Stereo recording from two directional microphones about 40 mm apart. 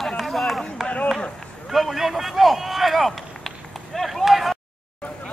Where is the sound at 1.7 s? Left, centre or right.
Centre.